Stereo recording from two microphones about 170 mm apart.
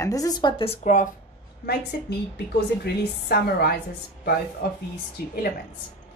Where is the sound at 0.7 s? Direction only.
45° left (ahead or behind).